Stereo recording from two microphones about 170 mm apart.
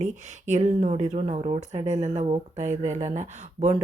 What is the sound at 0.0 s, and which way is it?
Speech, 40° right (ahead or behind).